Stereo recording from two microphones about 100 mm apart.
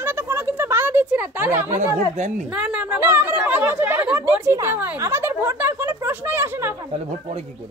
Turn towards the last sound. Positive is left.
turn(degrees=-20)  # may be behind; listen again after turning